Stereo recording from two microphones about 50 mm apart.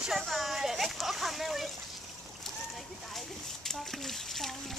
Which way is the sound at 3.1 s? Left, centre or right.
Centre.